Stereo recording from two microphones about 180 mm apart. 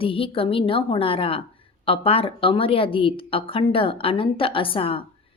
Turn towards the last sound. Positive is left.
turn(degrees=30)  # may be behind; listen again after turning